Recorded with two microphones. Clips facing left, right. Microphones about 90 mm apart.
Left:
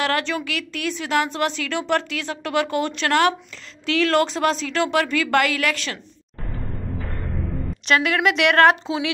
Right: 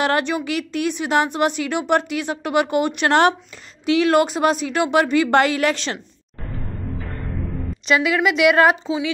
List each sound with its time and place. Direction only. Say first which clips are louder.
0.0 s a woman's voice: right 3 dB; 20° right (ahead or behind)
3.1 s a woman's voice: right 2 dB; 25° right (ahead or behind)
7.8 s a woman's voice: right 1 dB; 5° right (ahead or behind)